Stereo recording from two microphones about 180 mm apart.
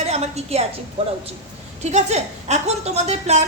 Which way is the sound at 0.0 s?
35° right (ahead or behind).